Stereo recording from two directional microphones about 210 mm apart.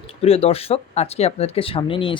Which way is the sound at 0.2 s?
30° left (ahead or behind).